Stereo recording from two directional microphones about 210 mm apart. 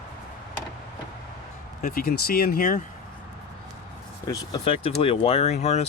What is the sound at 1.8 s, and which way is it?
Speech, 45° left (ahead or behind).